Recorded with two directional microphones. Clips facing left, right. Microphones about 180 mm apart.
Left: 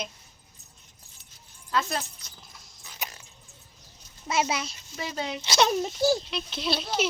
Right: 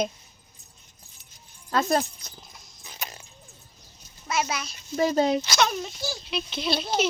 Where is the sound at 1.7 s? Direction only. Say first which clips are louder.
Right 6 dB; 40° right (ahead or behind).